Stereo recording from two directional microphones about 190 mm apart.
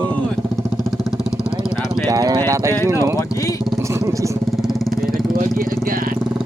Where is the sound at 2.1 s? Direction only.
20° right (ahead or behind).